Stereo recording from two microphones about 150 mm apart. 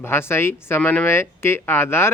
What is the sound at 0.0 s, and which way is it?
Speech, 15° left (ahead or behind).